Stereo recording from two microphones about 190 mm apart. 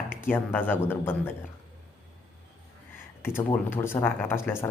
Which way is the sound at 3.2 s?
10° left (ahead or behind).